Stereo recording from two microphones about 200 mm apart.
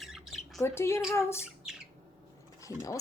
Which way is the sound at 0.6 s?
15° left (ahead or behind).